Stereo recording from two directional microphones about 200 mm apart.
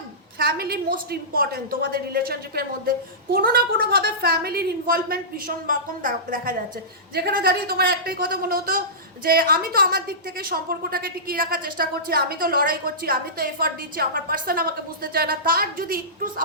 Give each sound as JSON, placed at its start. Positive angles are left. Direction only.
{"t": 0.3, "sound": "a woman's voice", "side_deg": -50}